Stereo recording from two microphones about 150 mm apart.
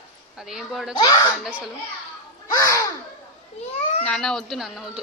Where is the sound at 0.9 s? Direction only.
25° left (ahead or behind).